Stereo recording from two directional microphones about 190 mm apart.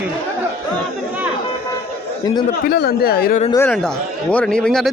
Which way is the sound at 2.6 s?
55° left (ahead or behind).